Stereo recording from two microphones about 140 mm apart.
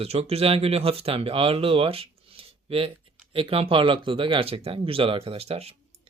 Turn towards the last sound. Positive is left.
turn(degrees=-45)  # may be behind; listen again after turning